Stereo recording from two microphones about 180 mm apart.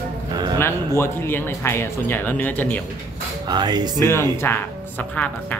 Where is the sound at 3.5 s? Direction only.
25° right (ahead or behind).